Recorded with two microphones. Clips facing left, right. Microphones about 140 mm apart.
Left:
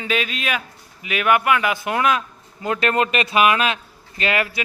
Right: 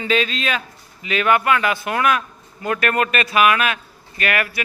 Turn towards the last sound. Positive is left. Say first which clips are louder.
# even
turn(degrees=20)  # may be behind; listen again after turning